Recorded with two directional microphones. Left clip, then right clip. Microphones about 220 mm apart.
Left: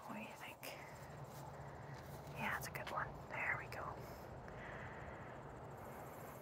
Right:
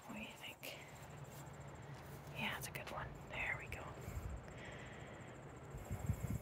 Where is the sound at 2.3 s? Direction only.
20° right (ahead or behind).